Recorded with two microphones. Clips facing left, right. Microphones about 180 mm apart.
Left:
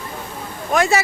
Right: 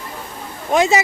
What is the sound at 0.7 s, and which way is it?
Speech, 20° right (ahead or behind).